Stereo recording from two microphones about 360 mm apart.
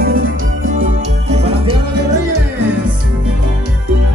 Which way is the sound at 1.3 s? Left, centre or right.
Centre.